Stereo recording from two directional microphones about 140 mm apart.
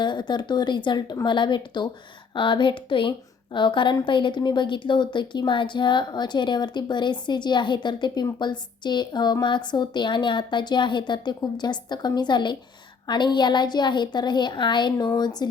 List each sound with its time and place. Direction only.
0.0 s a woman's voice: 35° left (ahead or behind)